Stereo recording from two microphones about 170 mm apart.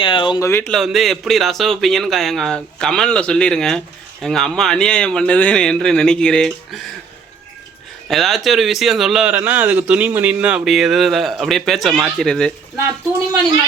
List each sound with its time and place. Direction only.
0.0 s speech: 30° left (ahead or behind)
0.4 s speech: 15° left (ahead or behind)
0.7 s speech: centre (ahead or behind)
8.0 s speech: centre (ahead or behind)